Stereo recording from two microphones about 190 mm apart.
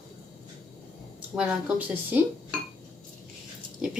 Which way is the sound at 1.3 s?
5° right (ahead or behind).